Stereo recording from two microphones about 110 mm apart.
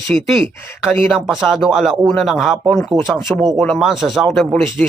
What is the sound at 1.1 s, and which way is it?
Speech, centre (ahead or behind).